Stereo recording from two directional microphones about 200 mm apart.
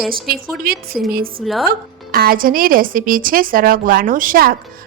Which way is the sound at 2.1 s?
50° right (ahead or behind).